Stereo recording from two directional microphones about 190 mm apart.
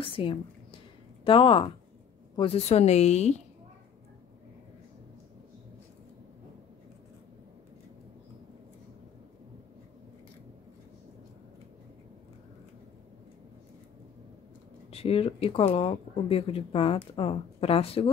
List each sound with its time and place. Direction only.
0.0 s a woman's voice: 25° left (ahead or behind)
14.9 s speech: 30° left (ahead or behind)